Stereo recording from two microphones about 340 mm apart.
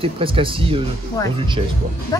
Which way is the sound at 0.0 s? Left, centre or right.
Centre.